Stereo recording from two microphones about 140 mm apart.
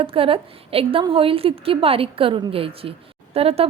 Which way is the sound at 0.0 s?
40° right (ahead or behind).